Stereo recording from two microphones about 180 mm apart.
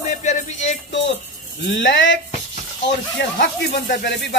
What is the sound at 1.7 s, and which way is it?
Speech, 90° left.